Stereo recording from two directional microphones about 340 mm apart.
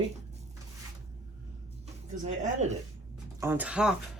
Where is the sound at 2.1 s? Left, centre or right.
Right.